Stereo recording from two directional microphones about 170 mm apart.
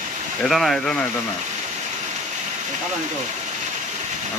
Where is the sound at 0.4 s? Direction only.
Centre (ahead or behind).